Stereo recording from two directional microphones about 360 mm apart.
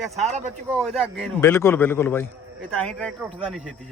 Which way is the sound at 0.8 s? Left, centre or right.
Centre.